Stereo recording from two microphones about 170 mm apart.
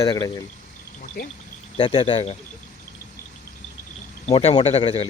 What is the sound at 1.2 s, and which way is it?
Speech, 60° left (ahead or behind).